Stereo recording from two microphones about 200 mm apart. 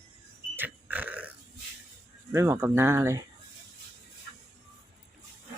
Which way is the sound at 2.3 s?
15° right (ahead or behind).